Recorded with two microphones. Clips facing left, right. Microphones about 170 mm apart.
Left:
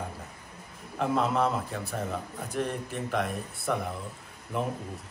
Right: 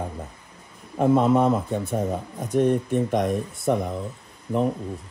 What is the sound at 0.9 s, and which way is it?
A man's voice, 40° right (ahead or behind).